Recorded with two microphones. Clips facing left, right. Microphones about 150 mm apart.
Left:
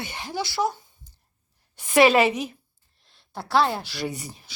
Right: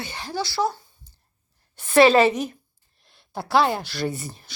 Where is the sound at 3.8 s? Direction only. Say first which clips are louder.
Right 3 dB; 10° left (ahead or behind).